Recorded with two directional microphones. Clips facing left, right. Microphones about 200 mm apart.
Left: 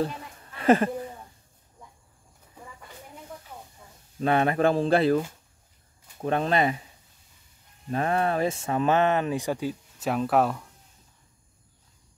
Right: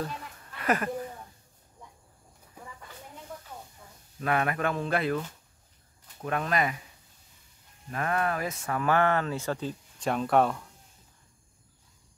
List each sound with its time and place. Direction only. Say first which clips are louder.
0.0 s a sound: left 6 dB; 25° left (ahead or behind)
4.2 s speech: left 6 dB; 30° left (ahead or behind)
6.2 s speech: left 5 dB; 30° left (ahead or behind)
7.9 s speech: left 4 dB; 30° left (ahead or behind); by 10.7 s centre (ahead or behind)